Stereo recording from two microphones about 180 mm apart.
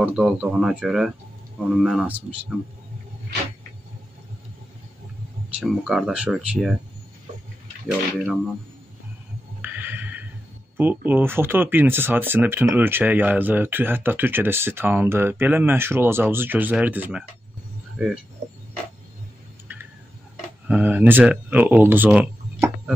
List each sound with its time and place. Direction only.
0.0 s speech: 5° right (ahead or behind)
5.6 s speech: centre (ahead or behind)
7.3 s wild animals: 40° right (ahead or behind)
9.6 s a sound: 10° right (ahead or behind)
10.8 s speech: 10° right (ahead or behind)
19.7 s a sound: 10° right (ahead or behind)
20.6 s speech: 10° right (ahead or behind)